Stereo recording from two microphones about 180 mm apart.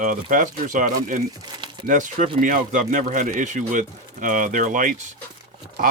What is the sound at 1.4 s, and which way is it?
Speech, 25° right (ahead or behind).